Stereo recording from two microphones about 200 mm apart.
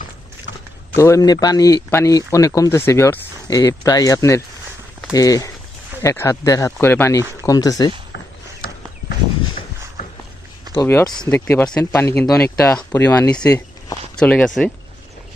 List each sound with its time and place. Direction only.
0.9 s speech: 15° left (ahead or behind)
10.8 s speech: 15° left (ahead or behind)
14.2 s speech: 5° left (ahead or behind)